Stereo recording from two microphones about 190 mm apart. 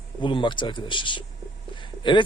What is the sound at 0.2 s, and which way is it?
Speech, 25° left (ahead or behind).